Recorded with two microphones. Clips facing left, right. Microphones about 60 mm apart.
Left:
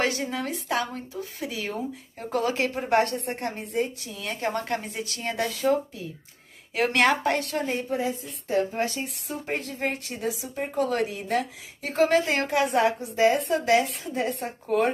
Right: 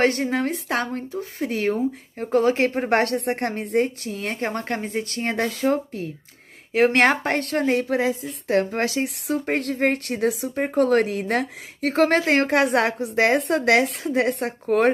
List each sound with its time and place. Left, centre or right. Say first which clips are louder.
0.0 s speech: right 6 dB; right
6.7 s a woman's voice: right 5 dB; right